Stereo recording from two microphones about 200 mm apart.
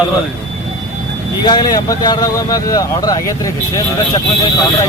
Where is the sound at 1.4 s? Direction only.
20° left (ahead or behind).